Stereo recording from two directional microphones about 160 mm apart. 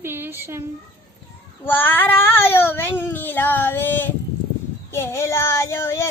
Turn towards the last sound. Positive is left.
turn(degrees=15)  # may be behind; listen again after turning